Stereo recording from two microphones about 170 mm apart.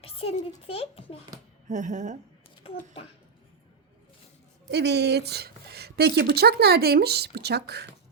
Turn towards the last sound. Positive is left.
turn(degrees=-75)  # may be behind; listen again after turning